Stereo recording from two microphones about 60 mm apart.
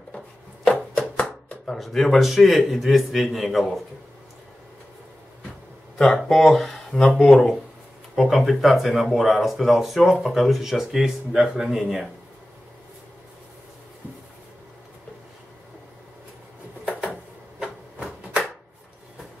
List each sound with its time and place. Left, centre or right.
0.7 s a sound: centre
1.7 s a man's voice: centre
6.2 s a man's voice: centre